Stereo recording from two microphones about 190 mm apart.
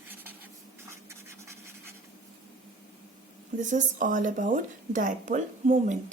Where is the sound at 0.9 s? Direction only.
15° right (ahead or behind).